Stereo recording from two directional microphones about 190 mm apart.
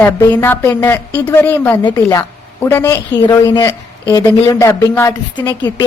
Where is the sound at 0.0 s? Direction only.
10° left (ahead or behind).